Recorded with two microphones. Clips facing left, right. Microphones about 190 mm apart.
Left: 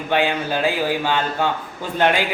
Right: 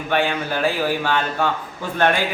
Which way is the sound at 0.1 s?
15° left (ahead or behind).